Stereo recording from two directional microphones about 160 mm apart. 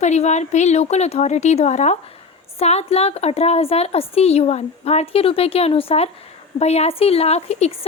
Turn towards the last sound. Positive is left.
turn(degrees=40)  # may be behind; listen again after turning